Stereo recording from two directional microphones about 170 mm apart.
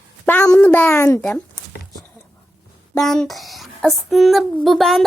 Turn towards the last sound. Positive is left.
turn(degrees=0)  # may be behind; listen again after turning